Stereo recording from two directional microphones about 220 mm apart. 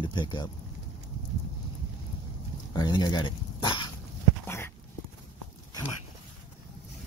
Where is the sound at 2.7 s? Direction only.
20° left (ahead or behind).